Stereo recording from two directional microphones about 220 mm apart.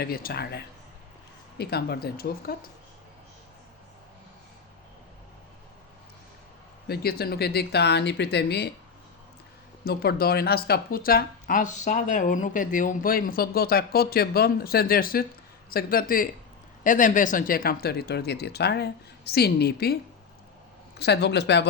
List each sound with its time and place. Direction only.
0.0 s speech: 45° left (ahead or behind)
6.8 s speech: 45° left (ahead or behind)
9.8 s speech: 45° left (ahead or behind)
21.0 s speech: 50° left (ahead or behind)